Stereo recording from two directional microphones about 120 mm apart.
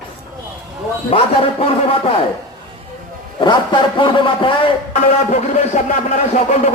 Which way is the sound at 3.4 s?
40° left (ahead or behind).